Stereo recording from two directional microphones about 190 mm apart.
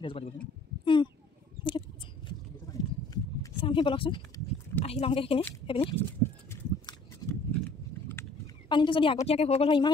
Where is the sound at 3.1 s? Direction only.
25° left (ahead or behind).